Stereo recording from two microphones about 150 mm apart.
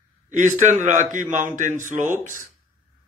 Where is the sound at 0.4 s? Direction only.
55° right (ahead or behind).